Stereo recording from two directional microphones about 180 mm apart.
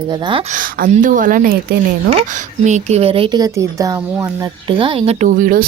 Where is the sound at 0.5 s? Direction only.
50° right (ahead or behind).